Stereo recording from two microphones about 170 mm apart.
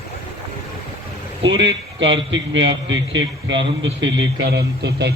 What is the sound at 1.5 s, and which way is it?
A man's voice, 90° right.